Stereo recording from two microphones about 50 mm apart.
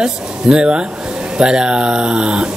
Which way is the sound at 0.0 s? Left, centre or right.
Centre.